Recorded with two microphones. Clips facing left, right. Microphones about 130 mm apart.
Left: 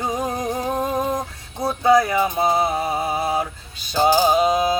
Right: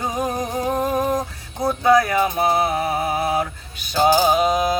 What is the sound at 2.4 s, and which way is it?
Music, centre (ahead or behind).